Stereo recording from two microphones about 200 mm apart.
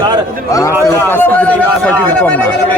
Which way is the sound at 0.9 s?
10° left (ahead or behind).